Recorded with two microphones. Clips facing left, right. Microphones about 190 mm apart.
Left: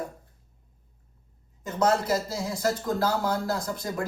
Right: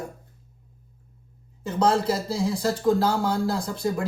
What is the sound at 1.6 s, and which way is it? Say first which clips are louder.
Speech: right 2 dB; 30° right (ahead or behind).